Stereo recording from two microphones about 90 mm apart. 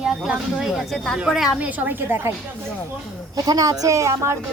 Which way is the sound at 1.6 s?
15° right (ahead or behind).